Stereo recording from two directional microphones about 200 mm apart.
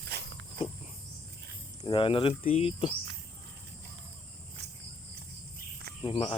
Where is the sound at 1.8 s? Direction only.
20° left (ahead or behind).